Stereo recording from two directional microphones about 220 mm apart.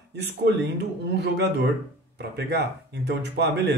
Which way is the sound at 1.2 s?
50° right (ahead or behind).